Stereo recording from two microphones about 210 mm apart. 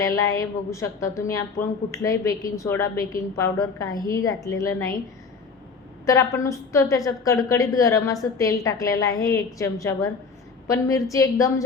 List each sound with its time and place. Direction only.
0.0 s a woman's voice: 15° left (ahead or behind)
6.1 s a woman's voice: 15° left (ahead or behind)